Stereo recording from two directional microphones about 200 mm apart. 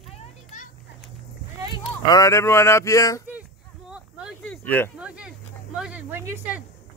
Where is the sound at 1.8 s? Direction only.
20° left (ahead or behind).